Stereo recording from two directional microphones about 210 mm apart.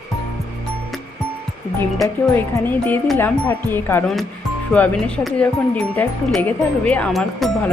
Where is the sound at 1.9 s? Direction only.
5° left (ahead or behind).